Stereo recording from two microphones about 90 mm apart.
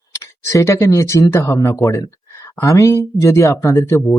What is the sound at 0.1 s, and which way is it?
Speech, 35° left (ahead or behind).